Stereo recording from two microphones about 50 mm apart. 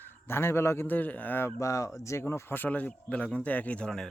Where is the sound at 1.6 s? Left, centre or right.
Left.